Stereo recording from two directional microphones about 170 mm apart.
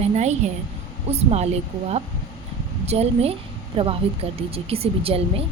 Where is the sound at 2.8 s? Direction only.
40° right (ahead or behind).